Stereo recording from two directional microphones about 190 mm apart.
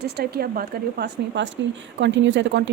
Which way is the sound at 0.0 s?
55° right (ahead or behind).